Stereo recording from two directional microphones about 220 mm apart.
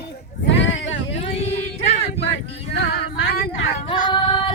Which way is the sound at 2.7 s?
45° left (ahead or behind).